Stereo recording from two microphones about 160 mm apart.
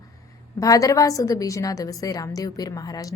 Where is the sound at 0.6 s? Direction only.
20° left (ahead or behind).